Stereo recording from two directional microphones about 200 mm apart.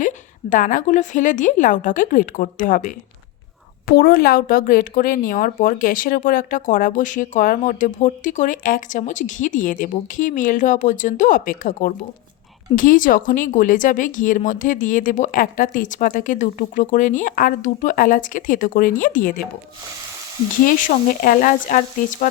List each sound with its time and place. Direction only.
0.5 s speech: 40° left (ahead or behind)
20.7 s speech: 45° left (ahead or behind)